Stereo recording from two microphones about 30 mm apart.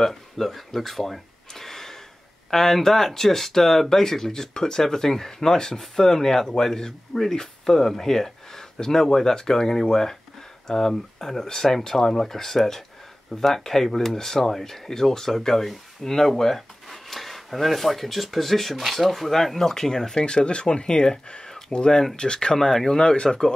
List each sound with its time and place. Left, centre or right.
0.0 s speech: centre
1.5 s gasp: centre
2.5 s speech: centre
20.2 s speech: left
21.5 s a sound: centre
21.7 s speech: left
22.6 s speech: centre
22.9 s speech: left